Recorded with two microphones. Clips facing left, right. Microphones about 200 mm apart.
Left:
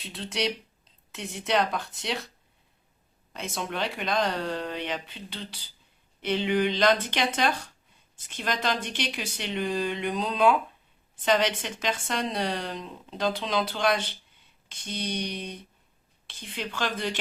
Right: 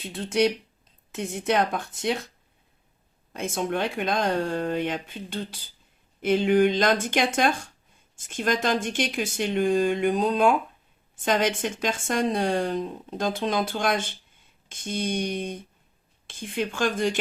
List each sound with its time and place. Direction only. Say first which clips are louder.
0.0 s speech: right 7 dB; 50° right (ahead or behind)
3.3 s speech: right 6 dB; 50° right (ahead or behind)